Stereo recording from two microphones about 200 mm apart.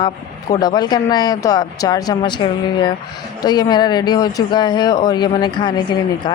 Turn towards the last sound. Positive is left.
turn(degrees=20)  # may be behind; listen again after turning